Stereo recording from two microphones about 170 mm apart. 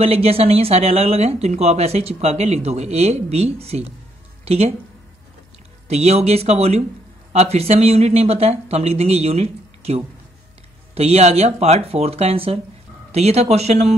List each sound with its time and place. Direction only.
0.0 s speech: 35° right (ahead or behind)
5.9 s speech: 40° right (ahead or behind)